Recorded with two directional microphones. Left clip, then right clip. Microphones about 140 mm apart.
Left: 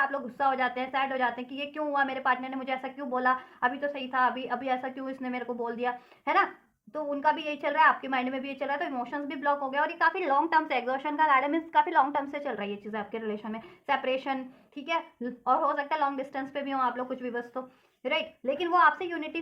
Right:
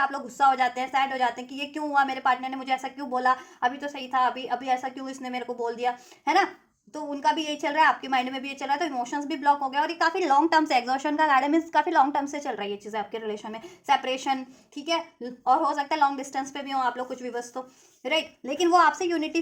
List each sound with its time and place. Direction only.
0.1 s a woman's voice: 30° right (ahead or behind)